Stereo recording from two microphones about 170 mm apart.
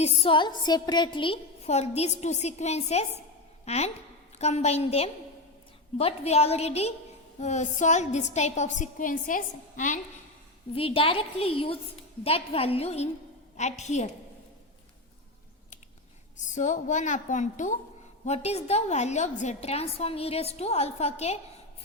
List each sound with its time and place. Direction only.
0.0 s a woman's voice: 35° left (ahead or behind); by 10.0 s 50° left (ahead or behind)
10.8 s a woman's voice: 35° left (ahead or behind)
16.5 s a woman's voice: 45° left (ahead or behind)